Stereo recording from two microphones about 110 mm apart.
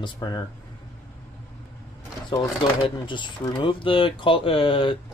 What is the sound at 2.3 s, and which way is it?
Speech, 45° left (ahead or behind).